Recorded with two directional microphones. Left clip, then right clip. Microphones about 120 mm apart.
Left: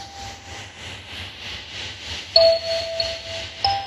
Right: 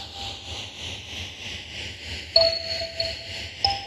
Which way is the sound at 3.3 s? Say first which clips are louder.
Left 2 dB; 90° left.